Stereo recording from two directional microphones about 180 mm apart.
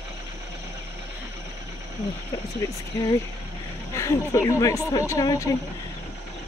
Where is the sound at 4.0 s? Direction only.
15° left (ahead or behind).